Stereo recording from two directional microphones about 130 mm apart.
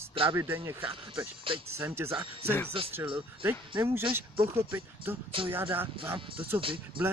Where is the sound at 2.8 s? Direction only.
45° right (ahead or behind).